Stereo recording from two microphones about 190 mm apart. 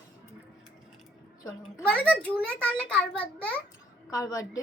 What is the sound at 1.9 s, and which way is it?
A woman's voice, 5° left (ahead or behind).